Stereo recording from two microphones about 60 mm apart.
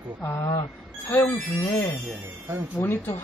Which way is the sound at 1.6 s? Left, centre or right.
Left.